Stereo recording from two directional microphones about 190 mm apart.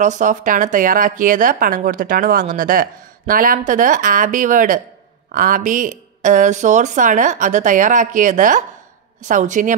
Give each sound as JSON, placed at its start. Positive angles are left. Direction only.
{"t": 0.0, "sound": "speech", "side_deg": -40}